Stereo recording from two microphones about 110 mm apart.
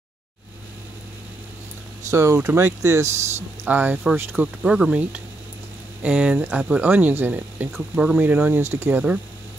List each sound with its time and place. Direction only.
2.0 s speech: 25° right (ahead or behind)